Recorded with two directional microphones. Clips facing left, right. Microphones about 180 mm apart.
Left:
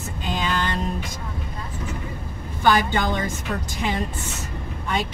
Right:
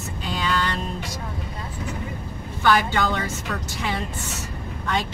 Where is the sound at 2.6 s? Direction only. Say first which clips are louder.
Left 1 dB; 15° left (ahead or behind).